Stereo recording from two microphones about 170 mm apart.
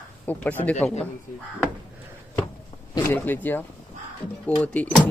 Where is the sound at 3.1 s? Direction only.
10° left (ahead or behind).